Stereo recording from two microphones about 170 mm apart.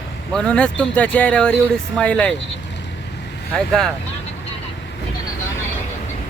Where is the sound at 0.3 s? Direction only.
5° left (ahead or behind).